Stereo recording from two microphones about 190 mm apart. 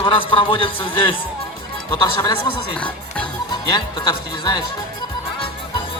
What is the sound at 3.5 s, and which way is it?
Speech, 20° left (ahead or behind).